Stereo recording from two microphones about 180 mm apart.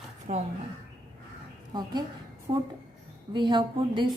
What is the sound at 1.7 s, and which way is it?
A woman's voice, 25° right (ahead or behind).